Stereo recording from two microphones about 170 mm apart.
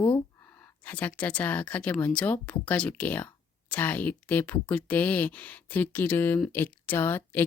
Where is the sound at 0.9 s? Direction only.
10° left (ahead or behind).